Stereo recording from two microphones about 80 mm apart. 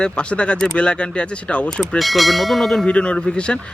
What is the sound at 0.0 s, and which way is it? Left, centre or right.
Speech, centre.